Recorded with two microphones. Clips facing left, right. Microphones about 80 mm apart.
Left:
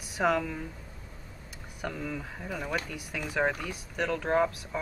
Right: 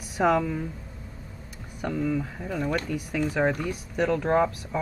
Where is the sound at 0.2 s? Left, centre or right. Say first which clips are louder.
Right 4 dB; centre.